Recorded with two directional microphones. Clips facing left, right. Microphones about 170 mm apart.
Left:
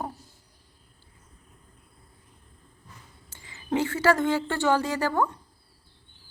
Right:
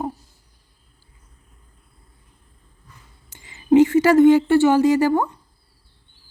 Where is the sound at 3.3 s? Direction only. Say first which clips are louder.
Right 13 dB; 15° right (ahead or behind).